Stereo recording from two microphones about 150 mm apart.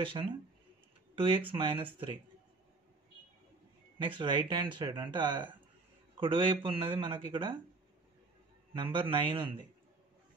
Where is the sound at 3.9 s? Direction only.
35° right (ahead or behind).